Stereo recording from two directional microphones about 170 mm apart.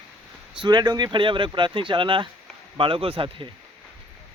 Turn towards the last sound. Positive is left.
turn(degrees=-30)  # may be behind; listen again after turning